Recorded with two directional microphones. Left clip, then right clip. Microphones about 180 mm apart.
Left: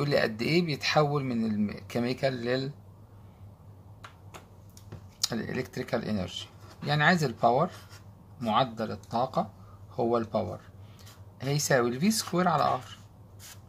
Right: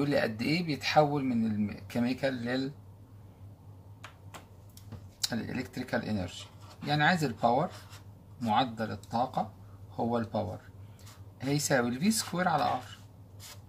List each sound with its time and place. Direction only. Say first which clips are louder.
0.0 s speech: left 2 dB; 40° left (ahead or behind)
5.2 s speech: left 3 dB; 40° left (ahead or behind)